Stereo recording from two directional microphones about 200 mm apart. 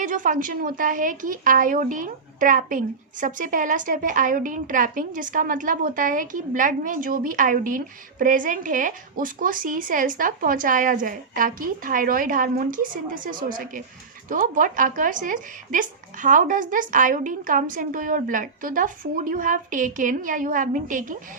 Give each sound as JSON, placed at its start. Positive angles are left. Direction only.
{"t": 0.0, "sound": "a woman's voice", "side_deg": -40}